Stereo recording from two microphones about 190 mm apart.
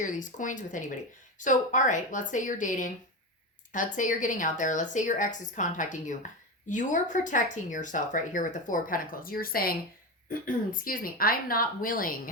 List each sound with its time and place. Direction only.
0.0 s a woman's voice: 40° left (ahead or behind)